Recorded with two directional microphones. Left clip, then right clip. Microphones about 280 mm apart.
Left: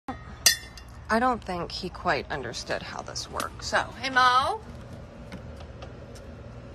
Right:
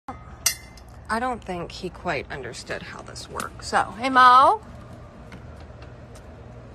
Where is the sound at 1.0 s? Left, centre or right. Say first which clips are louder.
Left 2 dB; centre.